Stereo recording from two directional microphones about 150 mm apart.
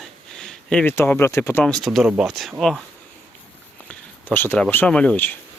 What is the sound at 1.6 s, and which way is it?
Speech, centre (ahead or behind).